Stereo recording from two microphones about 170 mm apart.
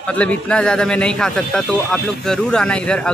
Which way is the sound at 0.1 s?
5° left (ahead or behind).